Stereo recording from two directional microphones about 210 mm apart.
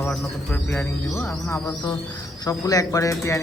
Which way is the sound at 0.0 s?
10° left (ahead or behind).